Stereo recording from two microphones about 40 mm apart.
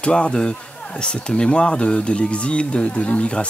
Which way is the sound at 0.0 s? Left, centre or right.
Left.